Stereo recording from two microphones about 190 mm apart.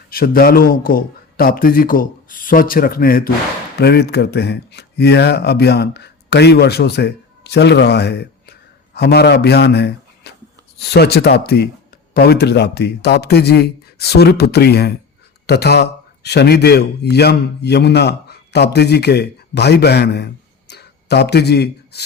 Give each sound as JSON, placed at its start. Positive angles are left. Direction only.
{"t": 0.1, "sound": "a man's voice", "side_deg": 50}